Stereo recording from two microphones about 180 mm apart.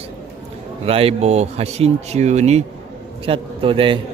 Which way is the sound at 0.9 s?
30° right (ahead or behind).